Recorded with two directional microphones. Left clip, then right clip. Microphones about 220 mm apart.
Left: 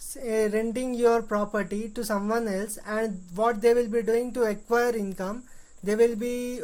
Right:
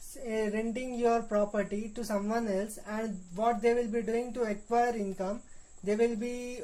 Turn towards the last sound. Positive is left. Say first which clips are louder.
# left 6 dB
turn(degrees=30)  # may be behind; listen again after turning